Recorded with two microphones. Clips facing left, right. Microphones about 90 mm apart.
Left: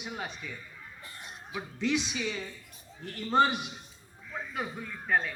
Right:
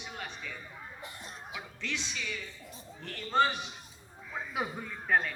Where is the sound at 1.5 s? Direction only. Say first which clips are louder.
Left 10 dB; 20° left (ahead or behind).